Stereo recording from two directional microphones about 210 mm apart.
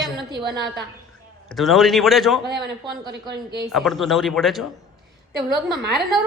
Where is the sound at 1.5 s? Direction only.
Centre (ahead or behind).